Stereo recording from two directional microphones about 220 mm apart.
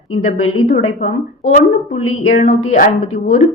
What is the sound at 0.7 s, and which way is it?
A woman's voice, 35° left (ahead or behind).